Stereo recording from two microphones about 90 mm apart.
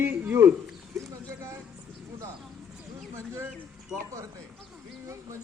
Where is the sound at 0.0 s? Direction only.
20° right (ahead or behind).